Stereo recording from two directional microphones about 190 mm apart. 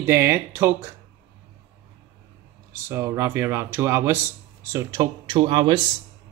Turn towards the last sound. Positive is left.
turn(degrees=-25)  # may be behind; listen again after turning